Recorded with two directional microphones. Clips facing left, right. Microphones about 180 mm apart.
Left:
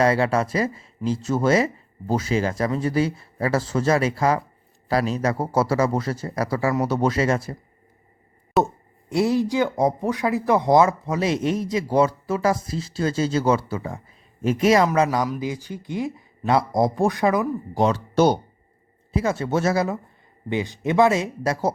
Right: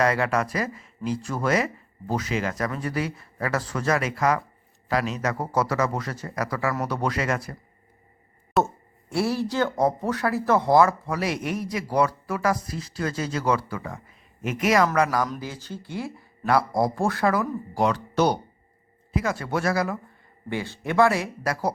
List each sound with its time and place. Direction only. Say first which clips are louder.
0.0 s speech: left 3 dB; 30° left (ahead or behind)
8.6 s speech: left 5 dB; 20° left (ahead or behind)